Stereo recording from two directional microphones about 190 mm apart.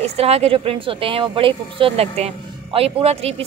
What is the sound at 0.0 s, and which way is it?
A woman's voice, 35° right (ahead or behind).